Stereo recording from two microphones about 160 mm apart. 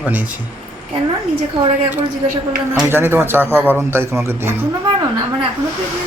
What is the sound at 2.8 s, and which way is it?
Speech, 15° right (ahead or behind).